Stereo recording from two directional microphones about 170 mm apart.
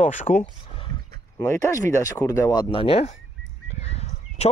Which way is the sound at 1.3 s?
15° left (ahead or behind).